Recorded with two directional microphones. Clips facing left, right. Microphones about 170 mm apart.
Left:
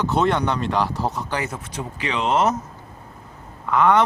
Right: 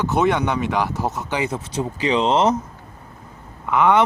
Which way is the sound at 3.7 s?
15° right (ahead or behind).